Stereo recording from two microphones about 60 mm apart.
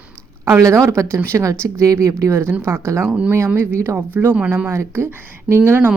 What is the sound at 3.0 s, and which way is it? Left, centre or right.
Speech, right.